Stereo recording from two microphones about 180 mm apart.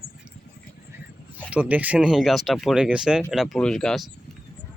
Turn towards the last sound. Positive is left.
turn(degrees=5)  # may be behind; listen again after turning